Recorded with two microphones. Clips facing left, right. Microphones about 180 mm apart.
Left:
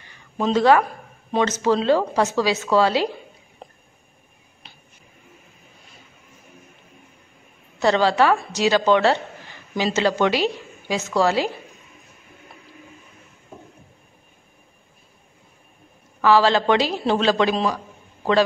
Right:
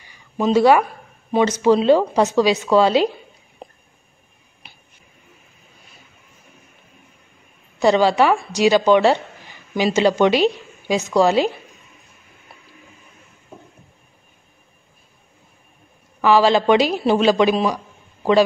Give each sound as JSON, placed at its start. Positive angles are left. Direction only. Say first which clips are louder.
{"t": 0.0, "sound": "a sound", "louder": "right 3 dB", "side_deg": -10}
{"t": 1.3, "sound": "a woman's voice", "louder": "right 4 dB", "side_deg": -10}
{"t": 7.8, "sound": "a woman's voice", "louder": "right 3 dB", "side_deg": -15}
{"t": 16.2, "sound": "a woman's voice", "louder": "right 2 dB", "side_deg": -15}